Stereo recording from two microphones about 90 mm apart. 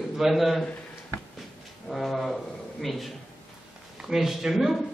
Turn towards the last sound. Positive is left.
turn(degrees=-5)  # may be behind; listen again after turning